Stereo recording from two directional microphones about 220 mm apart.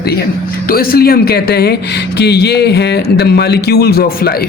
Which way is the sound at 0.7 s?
45° left (ahead or behind).